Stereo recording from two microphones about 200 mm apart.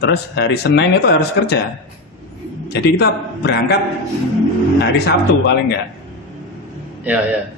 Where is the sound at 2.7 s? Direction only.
55° left (ahead or behind).